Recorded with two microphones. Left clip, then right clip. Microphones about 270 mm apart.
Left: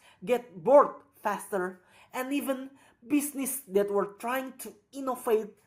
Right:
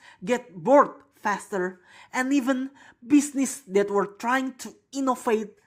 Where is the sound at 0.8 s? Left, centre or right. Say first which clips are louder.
Right 2 dB; right.